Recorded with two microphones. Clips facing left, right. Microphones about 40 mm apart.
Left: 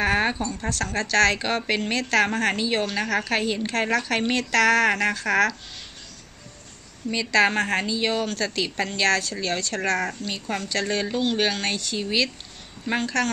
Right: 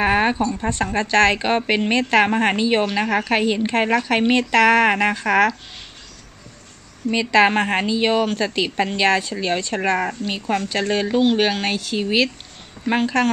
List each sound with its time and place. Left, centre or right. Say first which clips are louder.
0.0 s a woman's voice: right 5 dB; centre
7.1 s a woman's voice: right 5 dB; centre